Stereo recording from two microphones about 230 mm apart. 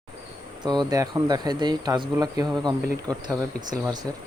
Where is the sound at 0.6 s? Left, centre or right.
Centre.